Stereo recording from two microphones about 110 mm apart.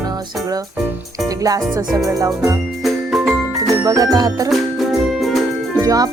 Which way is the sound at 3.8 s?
35° right (ahead or behind).